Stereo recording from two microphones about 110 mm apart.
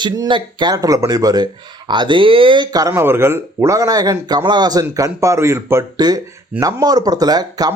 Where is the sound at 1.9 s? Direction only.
45° right (ahead or behind).